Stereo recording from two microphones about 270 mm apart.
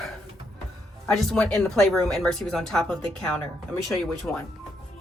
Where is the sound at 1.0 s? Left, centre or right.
Centre.